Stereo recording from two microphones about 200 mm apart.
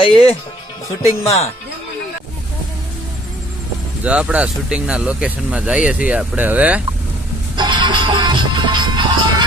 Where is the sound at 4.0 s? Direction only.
5° right (ahead or behind).